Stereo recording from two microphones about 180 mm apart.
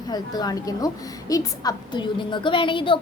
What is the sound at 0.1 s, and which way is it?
A woman's voice, 20° left (ahead or behind).